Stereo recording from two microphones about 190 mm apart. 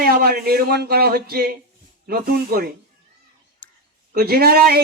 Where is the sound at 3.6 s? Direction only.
10° left (ahead or behind).